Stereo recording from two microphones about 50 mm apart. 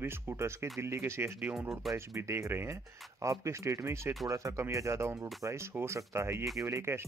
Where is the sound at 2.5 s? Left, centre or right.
Right.